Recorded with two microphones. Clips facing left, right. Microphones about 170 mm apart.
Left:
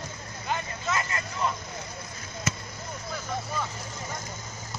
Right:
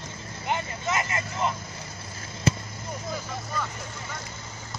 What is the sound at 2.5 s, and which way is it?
Basketball bounce, 30° right (ahead or behind).